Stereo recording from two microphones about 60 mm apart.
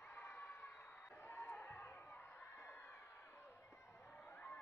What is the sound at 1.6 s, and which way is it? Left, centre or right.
Crowd, left.